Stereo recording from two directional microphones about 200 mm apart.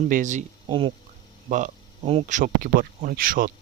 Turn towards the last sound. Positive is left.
turn(degrees=-45)  # may be behind; listen again after turning